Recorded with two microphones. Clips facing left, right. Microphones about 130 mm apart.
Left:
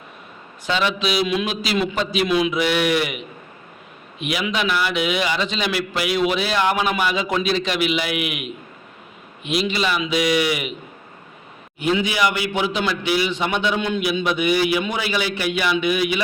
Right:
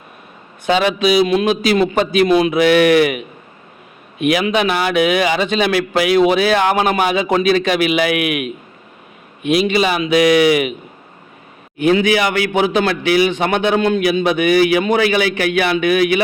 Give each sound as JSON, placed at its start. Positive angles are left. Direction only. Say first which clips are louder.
{"t": 0.6, "sound": "a man's voice", "louder": "right 7 dB", "side_deg": -55}
{"t": 9.4, "sound": "a man's voice", "louder": "right 7 dB", "side_deg": -55}
{"t": 11.8, "sound": "a man's voice", "louder": "right 6 dB", "side_deg": -55}